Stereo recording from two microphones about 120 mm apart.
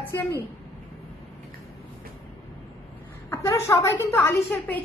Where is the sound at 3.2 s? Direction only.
20° left (ahead or behind).